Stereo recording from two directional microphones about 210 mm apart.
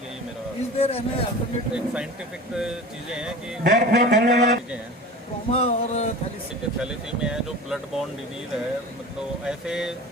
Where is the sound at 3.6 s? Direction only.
50° right (ahead or behind).